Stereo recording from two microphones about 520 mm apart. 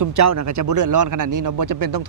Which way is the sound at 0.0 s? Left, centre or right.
Right.